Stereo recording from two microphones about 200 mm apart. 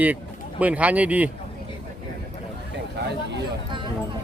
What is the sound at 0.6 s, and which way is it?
Speech, 5° right (ahead or behind).